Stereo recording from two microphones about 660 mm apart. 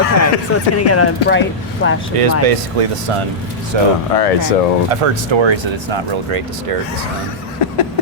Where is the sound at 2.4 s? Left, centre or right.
Right.